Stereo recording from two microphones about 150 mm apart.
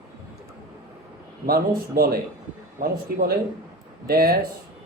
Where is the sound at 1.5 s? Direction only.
90° right.